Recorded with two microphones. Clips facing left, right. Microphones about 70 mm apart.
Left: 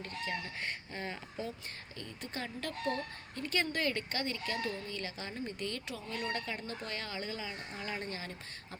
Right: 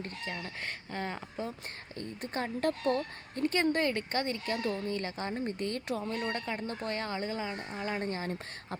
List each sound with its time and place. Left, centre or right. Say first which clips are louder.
0.9 s a woman's voice: right 4 dB; right
6.2 s a woman's voice: right 3 dB; right